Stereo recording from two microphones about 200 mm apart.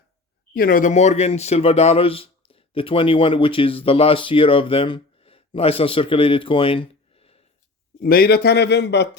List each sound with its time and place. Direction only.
0.5 s speech: 45° left (ahead or behind); by 7.4 s 30° left (ahead or behind)
8.0 s a man's voice: 50° left (ahead or behind)